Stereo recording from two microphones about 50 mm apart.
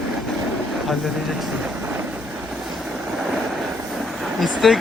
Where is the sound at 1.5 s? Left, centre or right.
Centre.